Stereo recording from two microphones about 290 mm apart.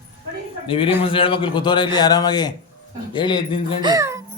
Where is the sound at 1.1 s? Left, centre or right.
Centre.